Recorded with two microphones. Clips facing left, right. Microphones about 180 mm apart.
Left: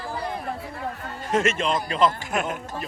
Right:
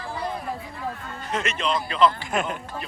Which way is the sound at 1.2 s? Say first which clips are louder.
Left 7 dB; 45° left (ahead or behind).